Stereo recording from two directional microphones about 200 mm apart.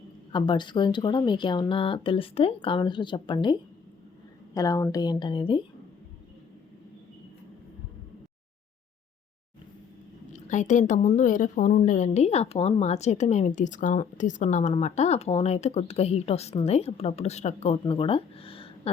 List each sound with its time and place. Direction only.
0.3 s speech: 25° left (ahead or behind)
10.3 s a woman's voice: 35° left (ahead or behind)